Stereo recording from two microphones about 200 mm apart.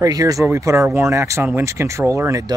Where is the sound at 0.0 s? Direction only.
15° right (ahead or behind).